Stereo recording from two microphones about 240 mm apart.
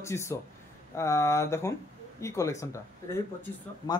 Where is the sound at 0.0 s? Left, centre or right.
Centre.